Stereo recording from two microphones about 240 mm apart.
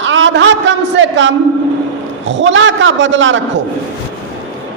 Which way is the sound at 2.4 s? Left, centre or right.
Right.